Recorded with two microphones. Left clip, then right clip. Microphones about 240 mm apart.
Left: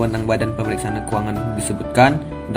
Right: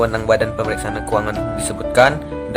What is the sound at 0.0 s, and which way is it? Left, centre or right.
Speech, centre.